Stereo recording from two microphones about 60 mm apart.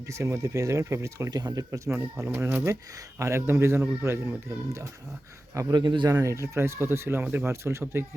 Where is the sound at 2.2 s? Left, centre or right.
Right.